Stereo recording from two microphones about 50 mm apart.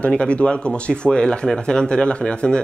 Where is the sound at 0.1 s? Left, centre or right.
Left.